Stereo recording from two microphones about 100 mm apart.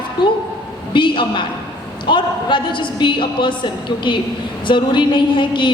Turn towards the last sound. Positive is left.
turn(degrees=55)  # may be behind; listen again after turning